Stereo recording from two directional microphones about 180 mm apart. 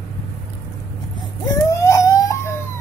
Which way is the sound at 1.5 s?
15° left (ahead or behind).